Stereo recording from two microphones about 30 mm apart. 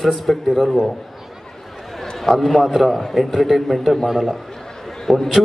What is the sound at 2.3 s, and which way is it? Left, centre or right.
A man's voice, centre.